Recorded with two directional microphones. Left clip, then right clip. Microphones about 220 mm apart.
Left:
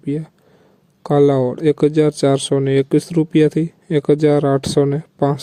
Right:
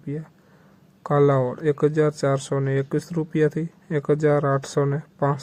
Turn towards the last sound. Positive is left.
turn(degrees=40)  # may be behind; listen again after turning